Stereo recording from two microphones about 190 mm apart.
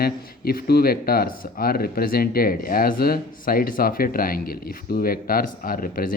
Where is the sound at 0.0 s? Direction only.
55° left (ahead or behind).